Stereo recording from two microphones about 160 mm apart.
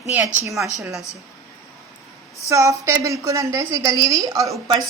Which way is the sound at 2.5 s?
20° right (ahead or behind).